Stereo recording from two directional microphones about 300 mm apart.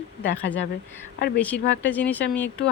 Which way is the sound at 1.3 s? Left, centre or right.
Centre.